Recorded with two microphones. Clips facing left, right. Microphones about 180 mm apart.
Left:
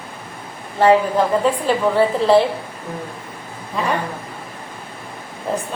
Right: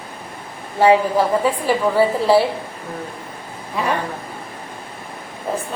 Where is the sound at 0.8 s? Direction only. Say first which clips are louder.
Even; 5° right (ahead or behind).